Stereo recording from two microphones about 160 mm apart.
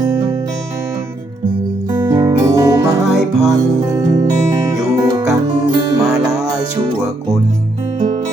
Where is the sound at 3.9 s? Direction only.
20° right (ahead or behind).